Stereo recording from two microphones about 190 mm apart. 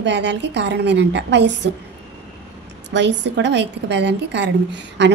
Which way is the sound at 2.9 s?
65° right (ahead or behind).